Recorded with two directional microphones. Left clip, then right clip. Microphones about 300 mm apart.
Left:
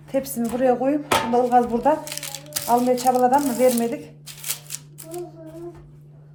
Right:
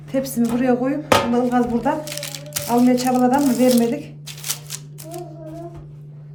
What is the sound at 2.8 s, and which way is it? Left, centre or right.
Speech, centre.